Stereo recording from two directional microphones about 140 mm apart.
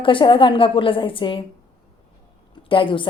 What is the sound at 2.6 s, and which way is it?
Speech, 40° left (ahead or behind).